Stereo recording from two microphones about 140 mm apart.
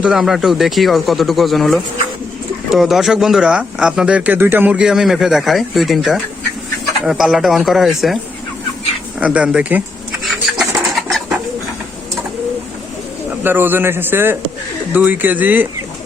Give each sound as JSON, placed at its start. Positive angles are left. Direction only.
{"t": 0.0, "sound": "speech", "side_deg": -5}
{"t": 9.2, "sound": "a man's voice", "side_deg": -10}
{"t": 10.2, "sound": "bird", "side_deg": -5}
{"t": 13.4, "sound": "a man's voice", "side_deg": -15}